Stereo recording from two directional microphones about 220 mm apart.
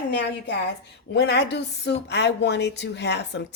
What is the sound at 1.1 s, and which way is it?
A woman's voice, 50° left (ahead or behind).